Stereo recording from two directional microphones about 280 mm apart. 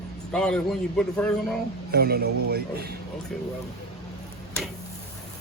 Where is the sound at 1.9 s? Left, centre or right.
Right.